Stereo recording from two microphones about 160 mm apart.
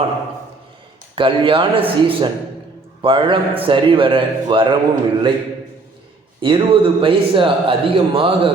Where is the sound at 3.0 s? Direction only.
35° right (ahead or behind).